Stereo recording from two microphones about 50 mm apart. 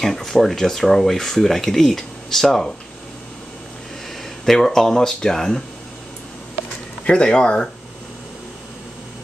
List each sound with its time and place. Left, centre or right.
0.0 s speech: centre
4.5 s speech: centre
7.1 s speech: centre